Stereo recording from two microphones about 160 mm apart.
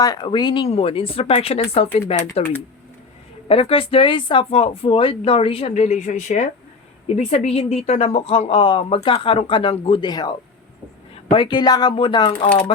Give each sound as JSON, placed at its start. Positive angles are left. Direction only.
{"t": 0.0, "sound": "speech", "side_deg": 25}
{"t": 3.5, "sound": "speech", "side_deg": 35}